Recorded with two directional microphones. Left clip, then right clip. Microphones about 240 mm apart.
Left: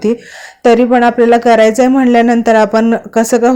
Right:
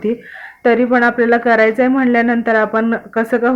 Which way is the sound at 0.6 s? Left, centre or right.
Left.